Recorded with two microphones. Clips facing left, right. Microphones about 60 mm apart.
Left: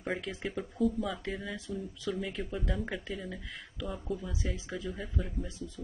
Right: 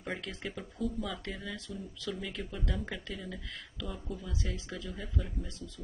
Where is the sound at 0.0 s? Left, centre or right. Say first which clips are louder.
Left 3 dB; centre.